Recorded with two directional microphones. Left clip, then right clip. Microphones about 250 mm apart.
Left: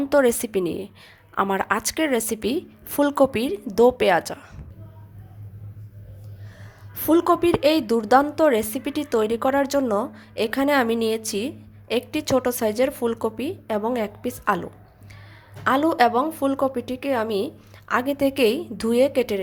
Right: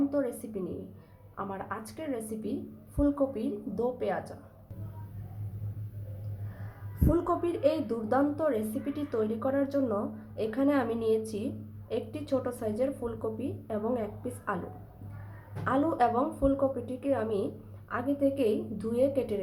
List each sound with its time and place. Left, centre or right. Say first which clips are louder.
0.1 s a woman's voice: left 14 dB; left
7.1 s a woman's voice: left 11 dB; left
15.6 s a woman's voice: left 9 dB; left